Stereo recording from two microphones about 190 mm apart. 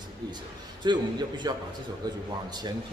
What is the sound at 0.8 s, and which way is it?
A man's voice, 25° right (ahead or behind).